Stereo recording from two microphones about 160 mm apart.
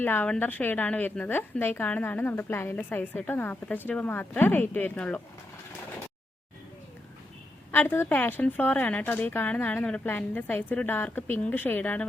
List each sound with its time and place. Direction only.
0.0 s a woman's voice: 10° left (ahead or behind)
7.7 s a woman's voice: 15° left (ahead or behind)